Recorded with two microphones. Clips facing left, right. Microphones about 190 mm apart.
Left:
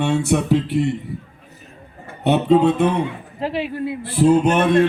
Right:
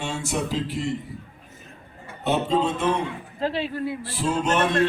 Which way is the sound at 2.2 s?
60° left (ahead or behind).